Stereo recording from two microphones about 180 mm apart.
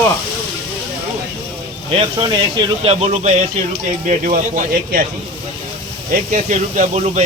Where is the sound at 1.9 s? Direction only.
25° right (ahead or behind); by 5.0 s 50° right (ahead or behind).